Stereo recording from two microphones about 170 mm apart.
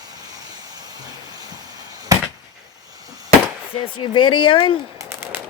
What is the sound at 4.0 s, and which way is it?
Speech, 30° left (ahead or behind).